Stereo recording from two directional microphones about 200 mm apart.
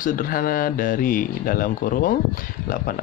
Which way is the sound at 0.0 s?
45° left (ahead or behind).